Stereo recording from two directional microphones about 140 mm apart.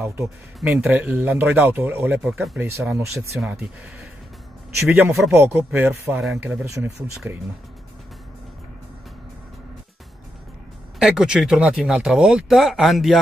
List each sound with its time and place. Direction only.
0.7 s speech: 10° right (ahead or behind)
11.0 s speech: 5° right (ahead or behind)